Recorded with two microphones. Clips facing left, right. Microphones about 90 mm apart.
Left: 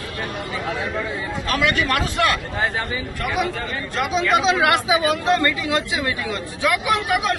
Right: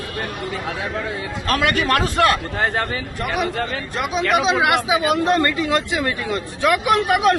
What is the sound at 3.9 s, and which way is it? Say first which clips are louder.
Speech: even; 15° right (ahead or behind).